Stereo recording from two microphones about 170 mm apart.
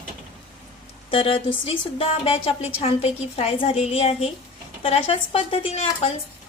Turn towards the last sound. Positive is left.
turn(degrees=35)  # may be behind; listen again after turning